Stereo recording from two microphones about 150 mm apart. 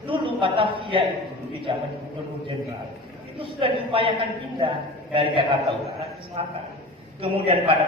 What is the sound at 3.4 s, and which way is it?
Speech, 35° right (ahead or behind).